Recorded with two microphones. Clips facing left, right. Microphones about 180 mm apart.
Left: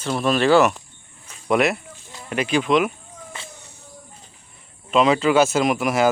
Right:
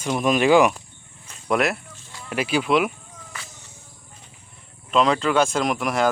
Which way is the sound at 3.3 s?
25° left (ahead or behind).